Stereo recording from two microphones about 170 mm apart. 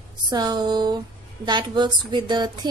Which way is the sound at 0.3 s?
25° right (ahead or behind).